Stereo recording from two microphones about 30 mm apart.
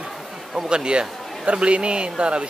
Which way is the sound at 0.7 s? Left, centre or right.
Right.